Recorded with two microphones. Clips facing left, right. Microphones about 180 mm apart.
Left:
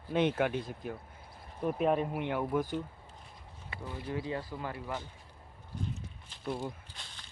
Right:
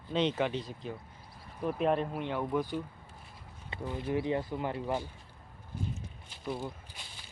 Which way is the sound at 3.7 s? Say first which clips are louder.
Right 5 dB; 20° right (ahead or behind).